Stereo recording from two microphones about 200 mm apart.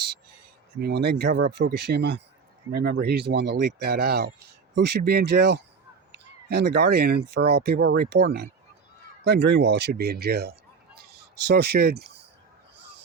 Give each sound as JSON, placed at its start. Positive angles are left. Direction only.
{"t": 0.8, "sound": "speech", "side_deg": -55}
{"t": 12.7, "sound": "owl", "side_deg": -60}